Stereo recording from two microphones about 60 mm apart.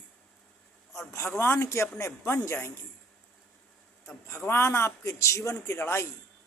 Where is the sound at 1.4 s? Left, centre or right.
Left.